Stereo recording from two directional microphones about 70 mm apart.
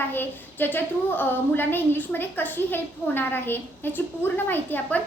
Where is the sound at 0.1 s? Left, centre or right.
Left.